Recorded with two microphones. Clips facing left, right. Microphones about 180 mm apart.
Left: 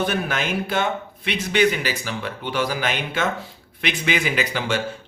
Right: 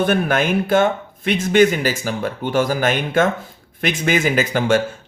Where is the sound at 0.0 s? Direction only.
50° right (ahead or behind).